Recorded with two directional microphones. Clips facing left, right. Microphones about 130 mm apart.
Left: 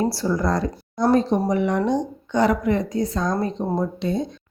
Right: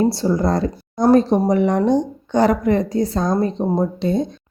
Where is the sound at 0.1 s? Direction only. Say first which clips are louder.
Right 4 dB; 25° right (ahead or behind).